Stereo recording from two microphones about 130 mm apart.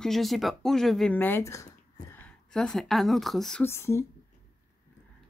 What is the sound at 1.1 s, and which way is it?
A woman's voice, 15° left (ahead or behind).